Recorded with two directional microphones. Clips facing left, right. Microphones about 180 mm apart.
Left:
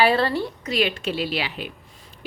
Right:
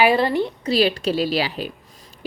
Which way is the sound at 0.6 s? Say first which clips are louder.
Right 5 dB; 35° right (ahead or behind).